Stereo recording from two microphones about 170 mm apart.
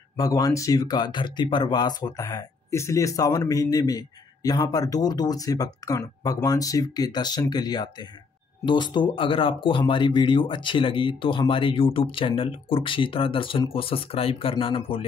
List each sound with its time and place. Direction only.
0.2 s speech: 20° left (ahead or behind)